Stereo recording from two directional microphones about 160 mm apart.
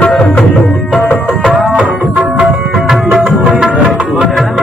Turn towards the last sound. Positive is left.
turn(degrees=0)  # may be behind; listen again after turning